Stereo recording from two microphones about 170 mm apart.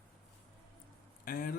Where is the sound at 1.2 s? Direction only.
60° left (ahead or behind).